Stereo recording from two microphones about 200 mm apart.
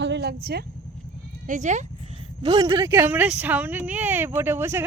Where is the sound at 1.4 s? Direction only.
40° right (ahead or behind).